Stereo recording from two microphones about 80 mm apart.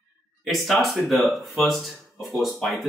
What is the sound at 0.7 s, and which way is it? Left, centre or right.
A man's voice, centre.